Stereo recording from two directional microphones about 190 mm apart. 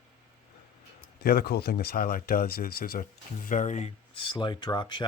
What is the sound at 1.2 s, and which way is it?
Speech, 55° left (ahead or behind).